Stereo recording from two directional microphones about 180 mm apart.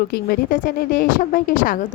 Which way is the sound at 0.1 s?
55° left (ahead or behind).